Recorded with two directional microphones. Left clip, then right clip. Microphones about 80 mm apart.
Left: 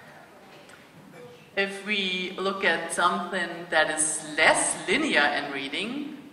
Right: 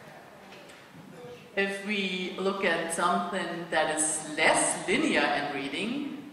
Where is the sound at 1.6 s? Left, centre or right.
Left.